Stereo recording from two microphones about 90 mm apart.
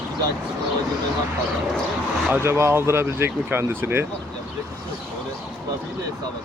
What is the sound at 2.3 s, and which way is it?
Speech, 30° right (ahead or behind).